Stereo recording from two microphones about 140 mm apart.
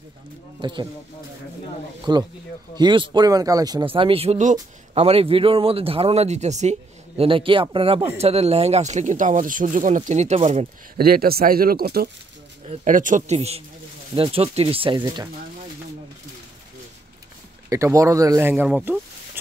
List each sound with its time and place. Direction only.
0.6 s speech: 35° right (ahead or behind)
2.1 s speech: 30° right (ahead or behind)
4.4 s speech: 60° right (ahead or behind)
5.0 s speech: 45° right (ahead or behind)
7.2 s speech: 40° right (ahead or behind)
11.0 s speech: 90° right
12.6 s speech: 65° right (ahead or behind); by 15.2 s 35° right (ahead or behind)
17.6 s speech: 20° right (ahead or behind)
18.5 s speech: 10° right (ahead or behind)